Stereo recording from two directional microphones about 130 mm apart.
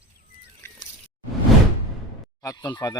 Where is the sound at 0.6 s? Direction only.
20° left (ahead or behind).